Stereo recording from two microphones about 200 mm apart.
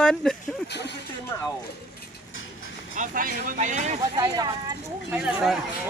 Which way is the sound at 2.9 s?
45° right (ahead or behind).